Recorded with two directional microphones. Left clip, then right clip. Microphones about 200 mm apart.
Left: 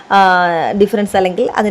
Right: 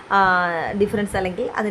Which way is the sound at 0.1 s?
25° left (ahead or behind).